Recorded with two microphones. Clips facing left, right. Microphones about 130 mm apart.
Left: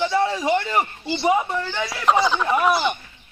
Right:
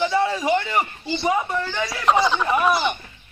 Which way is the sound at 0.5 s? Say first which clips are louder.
Even; 10° left (ahead or behind).